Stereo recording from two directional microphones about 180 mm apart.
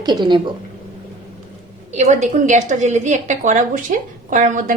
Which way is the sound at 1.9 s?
40° right (ahead or behind).